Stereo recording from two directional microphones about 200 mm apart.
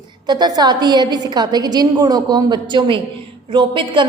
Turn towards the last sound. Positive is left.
turn(degrees=-25)  # may be behind; listen again after turning